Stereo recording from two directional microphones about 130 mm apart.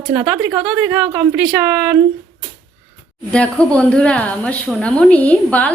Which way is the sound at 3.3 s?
10° left (ahead or behind).